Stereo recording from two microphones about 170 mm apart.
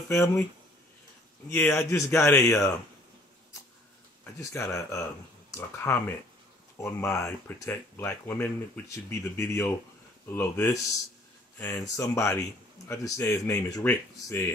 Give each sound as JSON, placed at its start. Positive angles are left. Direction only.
{"t": 1.5, "sound": "speech", "side_deg": 15}
{"t": 4.4, "sound": "speech", "side_deg": 15}
{"t": 11.8, "sound": "speech", "side_deg": 20}